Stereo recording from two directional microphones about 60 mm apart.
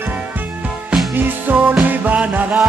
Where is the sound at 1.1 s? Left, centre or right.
Right.